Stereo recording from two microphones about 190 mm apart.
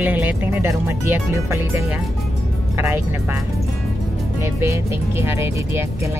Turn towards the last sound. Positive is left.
turn(degrees=-15)  # may be behind; listen again after turning